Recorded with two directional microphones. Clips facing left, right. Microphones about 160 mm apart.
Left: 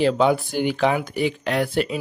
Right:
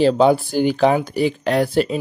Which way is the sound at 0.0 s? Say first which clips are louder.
Right 4 dB; 35° right (ahead or behind).